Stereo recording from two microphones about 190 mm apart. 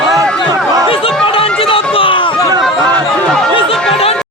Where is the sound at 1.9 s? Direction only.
25° left (ahead or behind).